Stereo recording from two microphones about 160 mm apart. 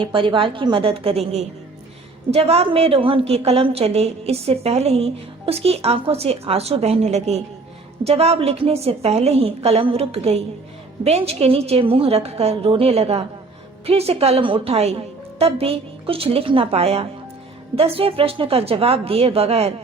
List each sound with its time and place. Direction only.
0.0 s a woman's voice: 30° right (ahead or behind)